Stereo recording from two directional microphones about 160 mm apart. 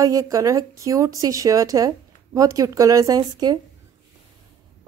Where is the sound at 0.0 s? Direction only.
20° right (ahead or behind).